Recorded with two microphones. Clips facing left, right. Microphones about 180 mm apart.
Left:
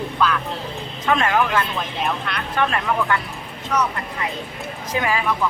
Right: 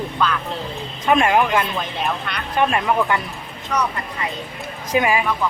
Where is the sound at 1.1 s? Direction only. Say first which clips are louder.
Right 3 dB; 15° right (ahead or behind).